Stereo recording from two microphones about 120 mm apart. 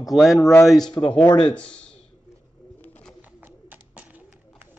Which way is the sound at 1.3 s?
40° left (ahead or behind).